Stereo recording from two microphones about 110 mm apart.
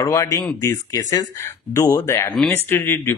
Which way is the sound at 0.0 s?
30° left (ahead or behind).